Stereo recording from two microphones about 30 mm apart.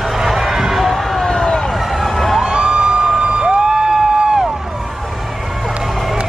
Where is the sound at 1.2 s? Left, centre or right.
Left.